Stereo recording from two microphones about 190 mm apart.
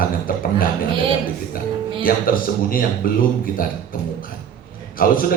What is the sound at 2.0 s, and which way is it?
A man's voice, 50° left (ahead or behind).